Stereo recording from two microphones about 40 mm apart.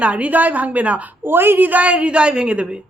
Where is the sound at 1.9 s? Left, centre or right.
Right.